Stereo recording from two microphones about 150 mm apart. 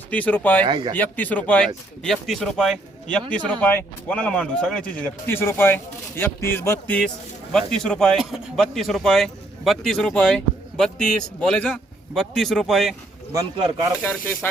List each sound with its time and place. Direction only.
0.1 s speech: 10° left (ahead or behind)
0.6 s speech: 30° right (ahead or behind)
0.9 s speech: 10° left (ahead or behind)
14.0 s speech: 15° left (ahead or behind)